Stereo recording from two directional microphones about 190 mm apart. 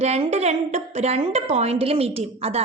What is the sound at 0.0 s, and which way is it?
A woman's voice, 35° right (ahead or behind).